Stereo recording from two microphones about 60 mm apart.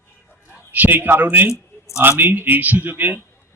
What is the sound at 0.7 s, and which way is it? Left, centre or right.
Speech, right.